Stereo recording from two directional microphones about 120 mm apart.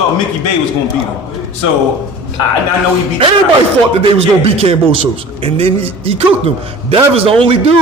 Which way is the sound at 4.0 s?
50° right (ahead or behind).